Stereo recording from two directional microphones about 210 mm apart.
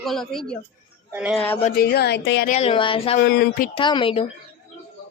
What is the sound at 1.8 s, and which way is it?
Speech, 50° left (ahead or behind).